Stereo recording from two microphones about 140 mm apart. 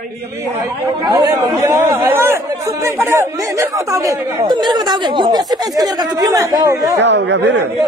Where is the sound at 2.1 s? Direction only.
20° right (ahead or behind).